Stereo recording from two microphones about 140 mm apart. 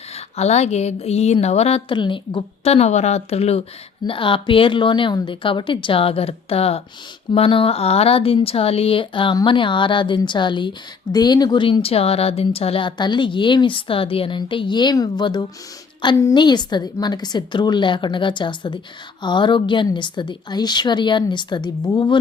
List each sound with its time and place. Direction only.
0.3 s a woman's voice: 50° left (ahead or behind); by 22.2 s 30° left (ahead or behind)